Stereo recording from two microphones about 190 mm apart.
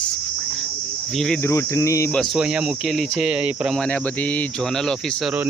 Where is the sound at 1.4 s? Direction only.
15° left (ahead or behind).